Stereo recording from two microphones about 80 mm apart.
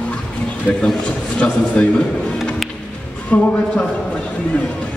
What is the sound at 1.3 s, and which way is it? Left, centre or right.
Speech, centre.